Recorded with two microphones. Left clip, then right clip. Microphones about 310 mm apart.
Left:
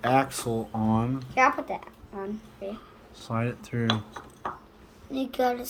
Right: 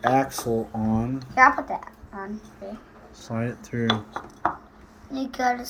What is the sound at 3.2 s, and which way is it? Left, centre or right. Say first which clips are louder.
A woman's voice: even; centre.